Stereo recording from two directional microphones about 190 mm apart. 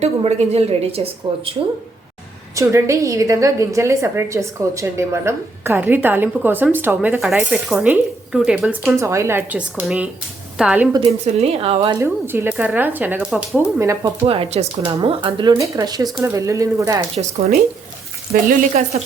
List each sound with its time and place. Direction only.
0.0 s a woman's voice: 35° right (ahead or behind)
2.6 s a woman's voice: 15° right (ahead or behind)
9.0 s a woman's voice: 15° right (ahead or behind)
11.3 s a woman's voice: 35° right (ahead or behind)
11.9 s a woman's voice: 15° right (ahead or behind)
13.8 s a woman's voice: 15° right (ahead or behind)
14.3 s a woman's voice: 30° right (ahead or behind); by 17.0 s 15° right (ahead or behind)
17.2 s a woman's voice: 35° right (ahead or behind)